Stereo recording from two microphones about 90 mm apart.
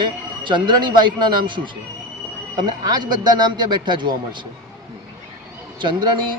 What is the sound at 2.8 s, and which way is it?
A man's voice, 50° right (ahead or behind).